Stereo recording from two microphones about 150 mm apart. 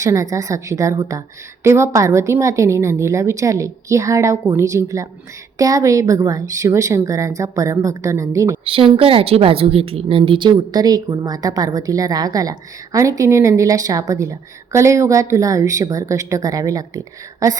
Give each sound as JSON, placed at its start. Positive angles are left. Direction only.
{"t": 0.0, "sound": "a woman's voice", "side_deg": -20}
{"t": 8.6, "sound": "a woman's voice", "side_deg": -40}